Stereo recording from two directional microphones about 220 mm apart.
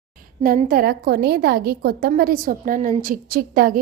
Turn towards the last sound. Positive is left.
turn(degrees=-40)  # may be behind; listen again after turning